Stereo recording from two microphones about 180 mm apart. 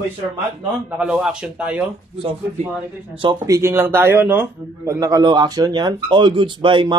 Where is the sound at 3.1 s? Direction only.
20° right (ahead or behind).